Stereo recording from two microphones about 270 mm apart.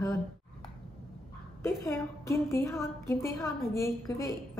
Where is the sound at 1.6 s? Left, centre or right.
Centre.